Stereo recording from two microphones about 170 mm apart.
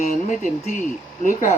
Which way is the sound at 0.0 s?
50° left (ahead or behind).